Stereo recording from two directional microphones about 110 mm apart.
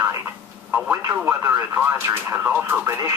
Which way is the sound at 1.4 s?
20° right (ahead or behind).